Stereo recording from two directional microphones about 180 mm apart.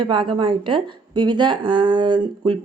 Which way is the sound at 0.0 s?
25° right (ahead or behind).